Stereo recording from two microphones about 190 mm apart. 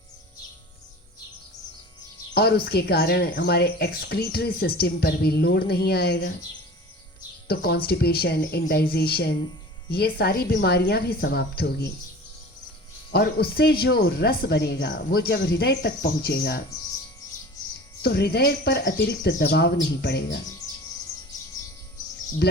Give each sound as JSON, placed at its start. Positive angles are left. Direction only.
{"t": 2.3, "sound": "a woman's voice", "side_deg": 55}
{"t": 7.4, "sound": "speech", "side_deg": 55}
{"t": 13.1, "sound": "speech", "side_deg": 55}
{"t": 18.0, "sound": "speech", "side_deg": 60}